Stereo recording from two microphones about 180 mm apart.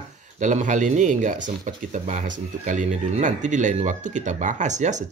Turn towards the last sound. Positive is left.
turn(degrees=-40)  # may be behind; listen again after turning